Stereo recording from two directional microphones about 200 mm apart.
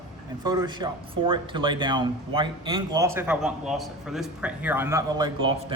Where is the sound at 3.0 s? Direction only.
10° right (ahead or behind).